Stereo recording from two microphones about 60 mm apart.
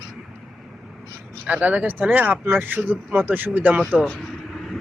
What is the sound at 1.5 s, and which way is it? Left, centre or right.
Speech, right.